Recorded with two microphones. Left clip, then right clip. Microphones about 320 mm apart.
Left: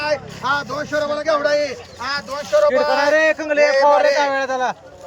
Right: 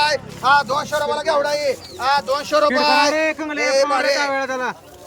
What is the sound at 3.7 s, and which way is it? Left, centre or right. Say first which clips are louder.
Speech: left 2 dB; right.